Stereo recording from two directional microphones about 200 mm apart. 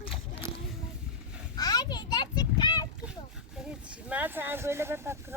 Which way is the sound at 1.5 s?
20° left (ahead or behind).